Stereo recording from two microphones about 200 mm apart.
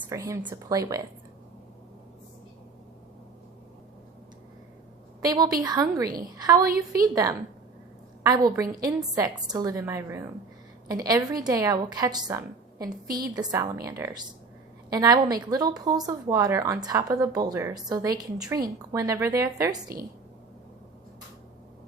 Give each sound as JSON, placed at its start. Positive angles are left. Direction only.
{"t": 0.1, "sound": "speech", "side_deg": -15}
{"t": 5.2, "sound": "a woman's voice", "side_deg": -20}
{"t": 13.1, "sound": "a woman's voice", "side_deg": -50}
{"t": 13.3, "sound": "a woman's voice", "side_deg": -20}